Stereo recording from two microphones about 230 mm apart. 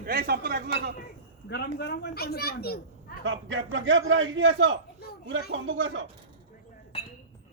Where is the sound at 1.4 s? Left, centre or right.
Left.